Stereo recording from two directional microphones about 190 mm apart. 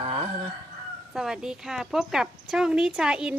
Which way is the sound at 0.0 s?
30° right (ahead or behind).